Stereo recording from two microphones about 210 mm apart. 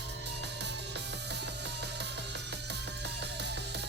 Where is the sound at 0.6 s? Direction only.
55° right (ahead or behind).